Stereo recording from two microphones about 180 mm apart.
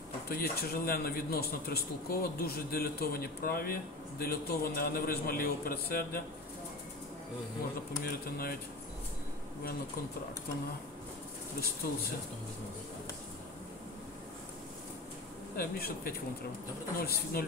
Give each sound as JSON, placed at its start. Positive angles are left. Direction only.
{"t": 0.3, "sound": "a man's voice", "side_deg": 55}
{"t": 8.0, "sound": "a man's voice", "side_deg": 55}
{"t": 15.5, "sound": "a man's voice", "side_deg": 55}